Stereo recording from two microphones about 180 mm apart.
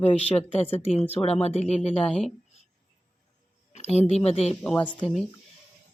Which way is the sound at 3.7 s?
35° left (ahead or behind).